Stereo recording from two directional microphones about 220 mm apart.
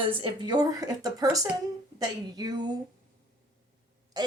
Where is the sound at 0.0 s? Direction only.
20° right (ahead or behind).